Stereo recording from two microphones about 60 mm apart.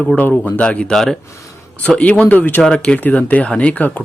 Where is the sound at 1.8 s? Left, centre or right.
Left.